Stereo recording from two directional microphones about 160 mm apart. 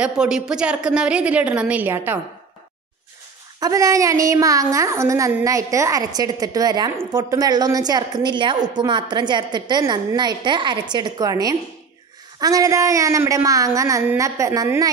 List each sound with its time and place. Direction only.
0.0 s a woman's voice: 5° right (ahead or behind)
3.5 s a woman's voice: 20° right (ahead or behind)